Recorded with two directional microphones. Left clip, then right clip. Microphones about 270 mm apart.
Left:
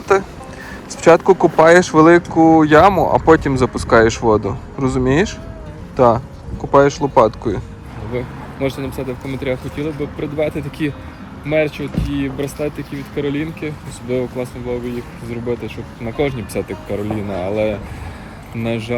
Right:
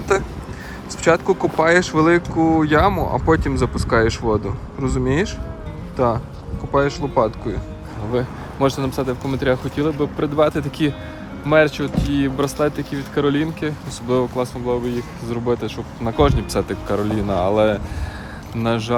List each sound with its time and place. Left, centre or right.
0.1 s speech: centre
8.6 s speech: centre
12.4 s speech: right
13.1 s speech: centre